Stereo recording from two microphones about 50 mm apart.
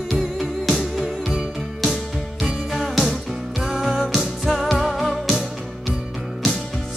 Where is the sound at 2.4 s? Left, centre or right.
Centre.